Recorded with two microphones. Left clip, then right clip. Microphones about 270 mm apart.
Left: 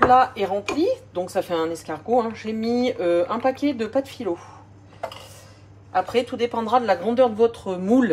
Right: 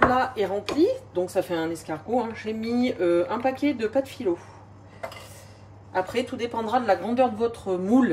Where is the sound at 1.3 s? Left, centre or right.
Centre.